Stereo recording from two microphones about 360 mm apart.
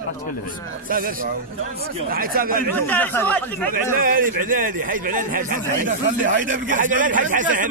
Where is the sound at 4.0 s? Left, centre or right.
Right.